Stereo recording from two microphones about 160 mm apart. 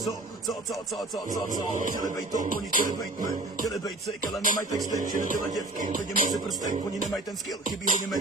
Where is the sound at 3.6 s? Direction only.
20° left (ahead or behind).